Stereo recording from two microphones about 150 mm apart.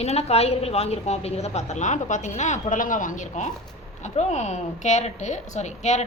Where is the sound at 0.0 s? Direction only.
45° left (ahead or behind).